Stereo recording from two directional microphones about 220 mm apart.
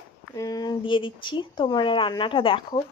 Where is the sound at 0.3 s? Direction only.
15° left (ahead or behind).